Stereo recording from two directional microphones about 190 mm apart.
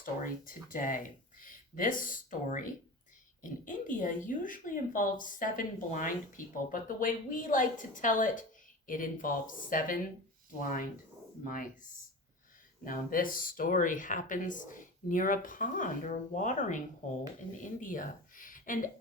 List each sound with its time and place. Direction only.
0.0 s speech: 45° left (ahead or behind)
3.7 s a woman's voice: 45° left (ahead or behind)